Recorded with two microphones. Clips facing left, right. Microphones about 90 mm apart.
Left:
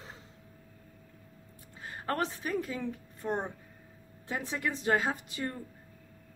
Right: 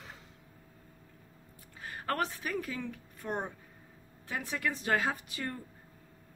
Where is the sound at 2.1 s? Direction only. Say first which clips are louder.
Left 1 dB; 25° left (ahead or behind).